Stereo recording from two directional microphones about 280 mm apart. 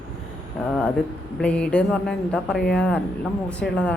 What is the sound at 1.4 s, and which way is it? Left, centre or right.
A man's voice, centre.